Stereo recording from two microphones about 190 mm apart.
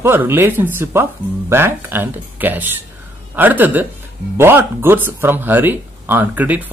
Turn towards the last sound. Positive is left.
turn(degrees=-10)  # may be behind; listen again after turning